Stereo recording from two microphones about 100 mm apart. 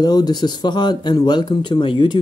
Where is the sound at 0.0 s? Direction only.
45° left (ahead or behind).